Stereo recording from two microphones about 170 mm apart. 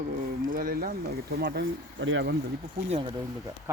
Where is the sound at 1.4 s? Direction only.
85° right.